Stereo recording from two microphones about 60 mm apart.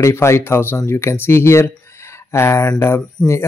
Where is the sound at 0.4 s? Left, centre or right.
Left.